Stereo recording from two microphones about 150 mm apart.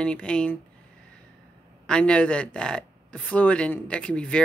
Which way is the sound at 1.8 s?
5° left (ahead or behind).